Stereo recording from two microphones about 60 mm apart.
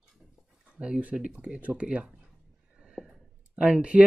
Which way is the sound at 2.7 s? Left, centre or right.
Centre.